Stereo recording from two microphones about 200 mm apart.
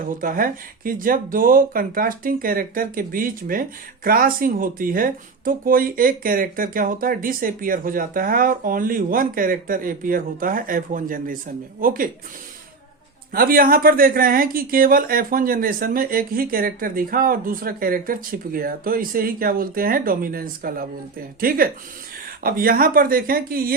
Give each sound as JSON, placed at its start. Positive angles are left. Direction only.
{"t": 0.0, "sound": "speech", "side_deg": -45}
{"t": 13.3, "sound": "speech", "side_deg": -45}